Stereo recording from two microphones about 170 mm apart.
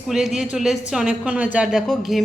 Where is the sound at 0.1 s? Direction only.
Centre (ahead or behind).